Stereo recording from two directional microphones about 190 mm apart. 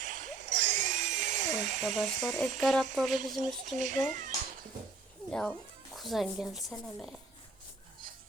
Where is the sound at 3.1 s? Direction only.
45° right (ahead or behind).